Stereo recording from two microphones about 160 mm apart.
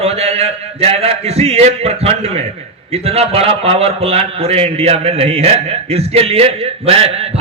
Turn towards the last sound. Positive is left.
turn(degrees=-40)  # may be behind; listen again after turning